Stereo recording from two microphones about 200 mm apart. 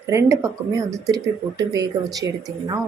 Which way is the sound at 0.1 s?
15° right (ahead or behind).